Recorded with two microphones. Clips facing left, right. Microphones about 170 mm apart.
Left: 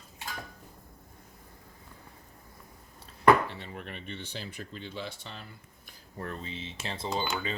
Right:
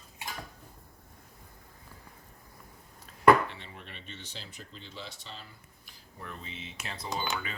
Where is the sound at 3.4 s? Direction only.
40° left (ahead or behind); by 5.5 s 60° left (ahead or behind).